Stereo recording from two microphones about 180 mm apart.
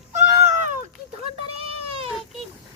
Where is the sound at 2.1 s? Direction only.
Centre (ahead or behind).